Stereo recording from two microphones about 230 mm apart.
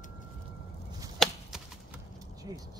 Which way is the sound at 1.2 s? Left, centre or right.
Centre.